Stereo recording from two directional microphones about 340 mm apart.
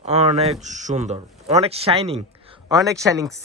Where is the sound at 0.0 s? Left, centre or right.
Centre.